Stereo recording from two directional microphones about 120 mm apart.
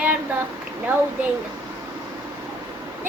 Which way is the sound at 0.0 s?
15° right (ahead or behind).